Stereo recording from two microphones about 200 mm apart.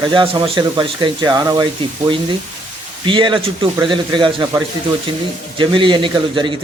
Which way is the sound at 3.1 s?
25° right (ahead or behind).